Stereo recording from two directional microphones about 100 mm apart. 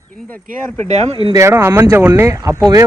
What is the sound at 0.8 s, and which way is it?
Speech, 90° right.